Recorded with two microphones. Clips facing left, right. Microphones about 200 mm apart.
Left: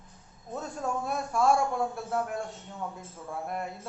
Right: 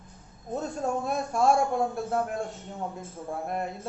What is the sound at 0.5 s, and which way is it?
Speech, 25° right (ahead or behind).